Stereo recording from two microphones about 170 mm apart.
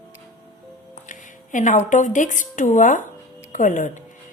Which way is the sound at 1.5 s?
50° left (ahead or behind).